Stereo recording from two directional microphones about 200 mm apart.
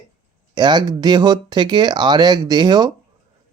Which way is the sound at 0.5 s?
20° right (ahead or behind).